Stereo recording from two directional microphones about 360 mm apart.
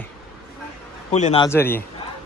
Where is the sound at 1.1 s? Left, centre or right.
Centre.